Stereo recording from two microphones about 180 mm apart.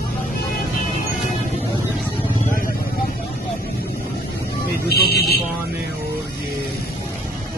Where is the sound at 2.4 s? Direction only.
50° left (ahead or behind).